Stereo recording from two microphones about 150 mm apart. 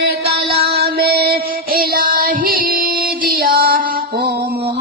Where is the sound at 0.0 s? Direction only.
90° right.